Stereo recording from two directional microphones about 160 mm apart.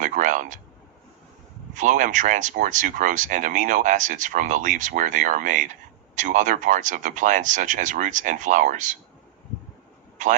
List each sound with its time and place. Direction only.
0.0 s a sound: 50° right (ahead or behind)
1.7 s speech: 50° right (ahead or behind)
10.2 s a man's voice: 50° right (ahead or behind)